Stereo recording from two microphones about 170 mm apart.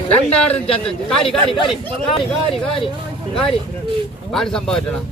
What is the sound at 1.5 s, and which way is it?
Speech, 30° left (ahead or behind).